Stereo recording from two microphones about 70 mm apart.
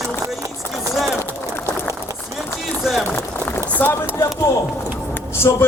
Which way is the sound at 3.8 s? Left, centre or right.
Left.